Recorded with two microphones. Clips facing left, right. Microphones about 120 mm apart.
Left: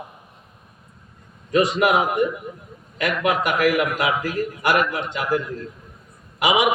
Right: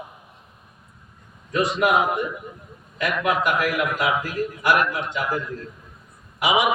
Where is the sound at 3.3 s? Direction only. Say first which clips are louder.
Left 3 dB; 65° left (ahead or behind).